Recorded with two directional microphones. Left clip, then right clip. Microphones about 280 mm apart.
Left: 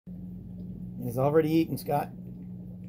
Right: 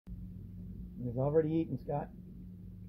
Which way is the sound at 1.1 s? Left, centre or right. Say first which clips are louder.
Left 7 dB; left.